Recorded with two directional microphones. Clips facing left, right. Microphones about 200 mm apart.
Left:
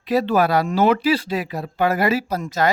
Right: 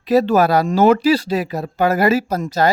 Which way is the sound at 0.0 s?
40° right (ahead or behind).